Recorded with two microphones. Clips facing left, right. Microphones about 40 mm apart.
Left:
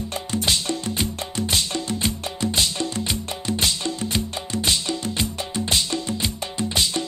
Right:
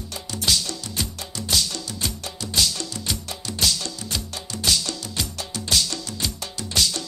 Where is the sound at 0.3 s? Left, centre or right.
Left.